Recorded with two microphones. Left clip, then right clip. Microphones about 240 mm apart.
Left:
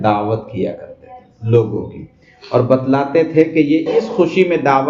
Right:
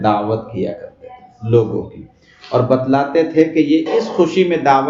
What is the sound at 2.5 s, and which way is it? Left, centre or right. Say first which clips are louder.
A man's voice: left 1 dB; centre.